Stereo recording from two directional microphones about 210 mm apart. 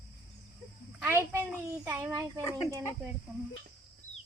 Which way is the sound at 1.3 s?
10° right (ahead or behind).